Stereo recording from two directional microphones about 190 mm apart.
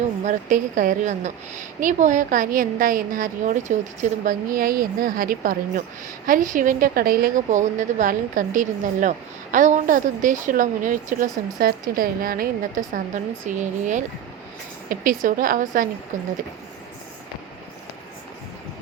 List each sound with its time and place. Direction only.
0.3 s a woman's voice: 40° right (ahead or behind)